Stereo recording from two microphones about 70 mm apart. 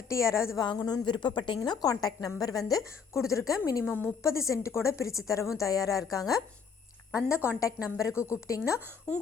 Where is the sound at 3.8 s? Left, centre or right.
Left.